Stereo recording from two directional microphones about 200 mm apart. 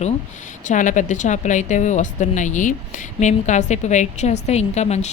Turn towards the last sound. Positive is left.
turn(degrees=35)  # may be behind; listen again after turning